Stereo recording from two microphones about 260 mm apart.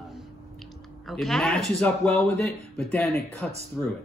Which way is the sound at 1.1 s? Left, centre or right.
Centre.